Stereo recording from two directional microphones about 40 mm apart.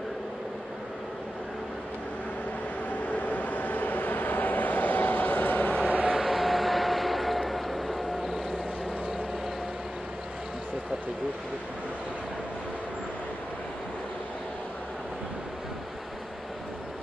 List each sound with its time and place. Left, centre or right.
3.1 s vehicle: left
5.9 s a sound: right
6.1 s vehicle: centre